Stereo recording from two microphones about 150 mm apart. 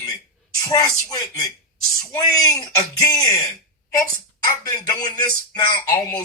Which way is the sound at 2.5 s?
25° left (ahead or behind).